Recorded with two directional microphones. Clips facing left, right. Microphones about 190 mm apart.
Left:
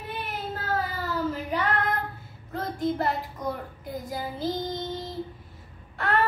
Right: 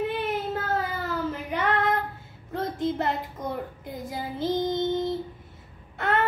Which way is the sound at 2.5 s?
25° right (ahead or behind).